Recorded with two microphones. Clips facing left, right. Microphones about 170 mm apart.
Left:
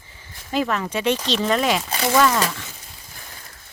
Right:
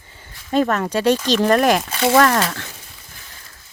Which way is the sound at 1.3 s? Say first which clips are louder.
Right 5 dB; 55° right (ahead or behind).